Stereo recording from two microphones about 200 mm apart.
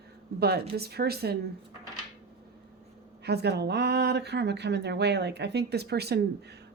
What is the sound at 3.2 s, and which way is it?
Speech, 55° right (ahead or behind).